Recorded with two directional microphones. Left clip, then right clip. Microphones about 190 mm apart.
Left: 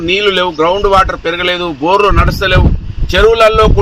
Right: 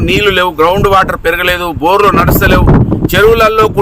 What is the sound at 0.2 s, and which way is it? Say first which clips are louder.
Speech: right 4 dB; 30° right (ahead or behind).